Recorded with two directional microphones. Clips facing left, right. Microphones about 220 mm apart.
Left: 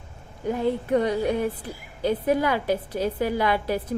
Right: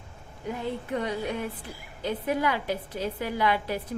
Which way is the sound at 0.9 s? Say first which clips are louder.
Left 7 dB; 40° left (ahead or behind).